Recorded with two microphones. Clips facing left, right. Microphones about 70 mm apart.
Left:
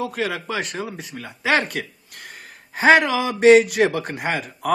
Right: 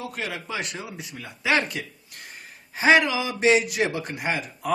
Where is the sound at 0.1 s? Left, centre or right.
Left.